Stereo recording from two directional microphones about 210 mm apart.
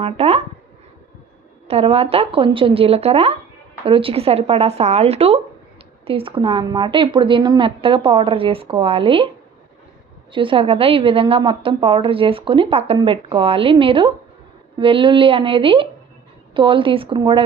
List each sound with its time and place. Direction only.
0.0 s speech: 30° right (ahead or behind)
1.6 s a woman's voice: 30° right (ahead or behind)
10.3 s a woman's voice: 25° right (ahead or behind)